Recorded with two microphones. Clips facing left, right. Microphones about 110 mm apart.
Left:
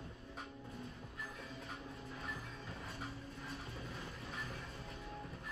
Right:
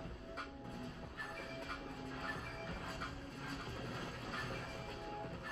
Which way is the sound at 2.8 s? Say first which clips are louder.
Right 1 dB; 30° right (ahead or behind).